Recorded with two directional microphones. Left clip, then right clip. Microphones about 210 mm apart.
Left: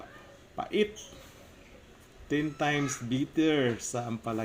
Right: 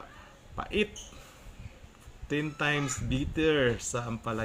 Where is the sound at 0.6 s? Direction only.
50° right (ahead or behind).